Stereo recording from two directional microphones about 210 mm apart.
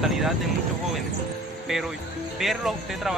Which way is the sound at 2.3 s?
Centre (ahead or behind).